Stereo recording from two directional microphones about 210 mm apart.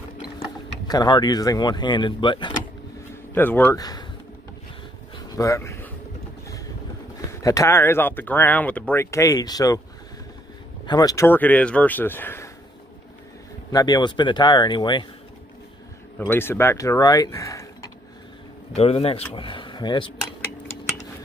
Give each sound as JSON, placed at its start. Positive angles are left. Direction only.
{"t": 0.8, "sound": "speech", "side_deg": 20}
{"t": 3.3, "sound": "speech", "side_deg": 10}
{"t": 5.1, "sound": "a sound", "side_deg": 15}
{"t": 7.4, "sound": "speech", "side_deg": 15}
{"t": 10.9, "sound": "speech", "side_deg": 20}
{"t": 13.7, "sound": "speech", "side_deg": 20}
{"t": 16.2, "sound": "speech", "side_deg": 10}
{"t": 18.8, "sound": "speech", "side_deg": 25}